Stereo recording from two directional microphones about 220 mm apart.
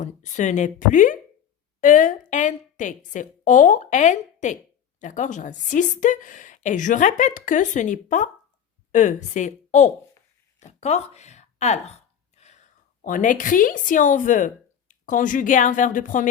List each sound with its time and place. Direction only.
0.0 s a woman's voice: 35° left (ahead or behind)
12.3 s whispering: 30° left (ahead or behind)
13.0 s a woman's voice: 35° left (ahead or behind)